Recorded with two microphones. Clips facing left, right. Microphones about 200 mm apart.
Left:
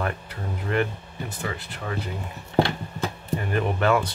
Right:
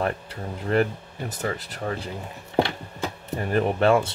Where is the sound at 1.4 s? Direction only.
40° right (ahead or behind).